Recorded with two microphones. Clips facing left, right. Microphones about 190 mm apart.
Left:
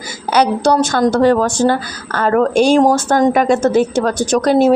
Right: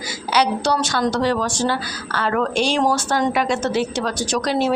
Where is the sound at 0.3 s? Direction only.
50° left (ahead or behind).